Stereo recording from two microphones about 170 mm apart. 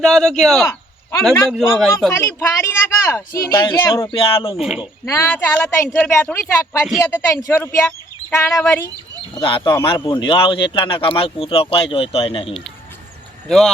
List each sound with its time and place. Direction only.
0.0 s a man's voice: centre (ahead or behind)
2.1 s speech: 15° left (ahead or behind); by 4.5 s 30° left (ahead or behind)
4.5 s a man's voice: 5° right (ahead or behind)
5.0 s speech: 15° left (ahead or behind)
9.4 s speech: 30° left (ahead or behind)